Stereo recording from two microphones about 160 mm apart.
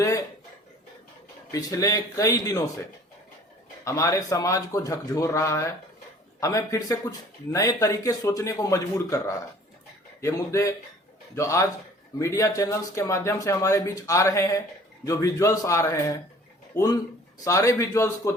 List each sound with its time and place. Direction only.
1.5 s speech: 20° left (ahead or behind)
3.8 s speech: 20° left (ahead or behind)